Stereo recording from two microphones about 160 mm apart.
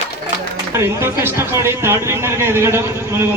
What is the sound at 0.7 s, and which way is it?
A man's voice, 15° right (ahead or behind).